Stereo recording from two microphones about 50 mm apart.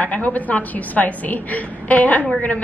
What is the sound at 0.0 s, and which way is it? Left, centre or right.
A woman's voice, left.